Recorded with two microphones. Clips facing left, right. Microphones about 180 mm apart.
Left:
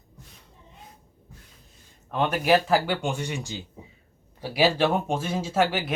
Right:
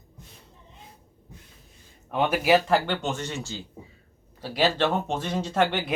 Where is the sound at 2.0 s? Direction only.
5° right (ahead or behind).